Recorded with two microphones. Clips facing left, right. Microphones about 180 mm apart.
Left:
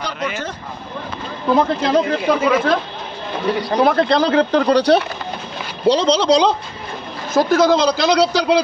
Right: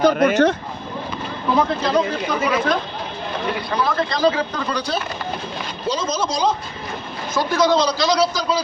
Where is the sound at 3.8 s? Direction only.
65° left (ahead or behind).